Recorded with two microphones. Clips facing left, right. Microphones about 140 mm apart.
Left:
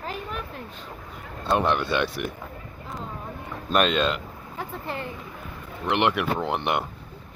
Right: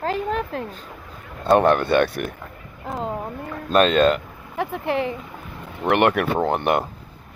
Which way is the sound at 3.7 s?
40° right (ahead or behind).